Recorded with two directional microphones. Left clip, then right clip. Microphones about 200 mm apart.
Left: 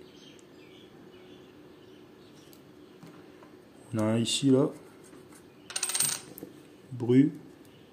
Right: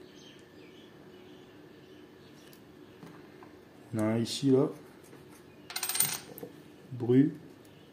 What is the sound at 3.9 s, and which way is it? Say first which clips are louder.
Speech: left 3 dB; 20° left (ahead or behind).